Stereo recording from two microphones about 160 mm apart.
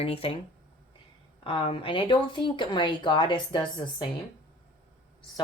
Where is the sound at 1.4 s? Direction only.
30° left (ahead or behind).